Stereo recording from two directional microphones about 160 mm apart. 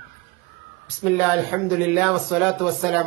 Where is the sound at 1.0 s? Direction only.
5° right (ahead or behind).